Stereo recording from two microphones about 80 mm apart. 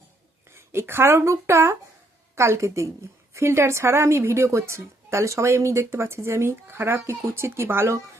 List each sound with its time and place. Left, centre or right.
0.5 s a woman's voice: right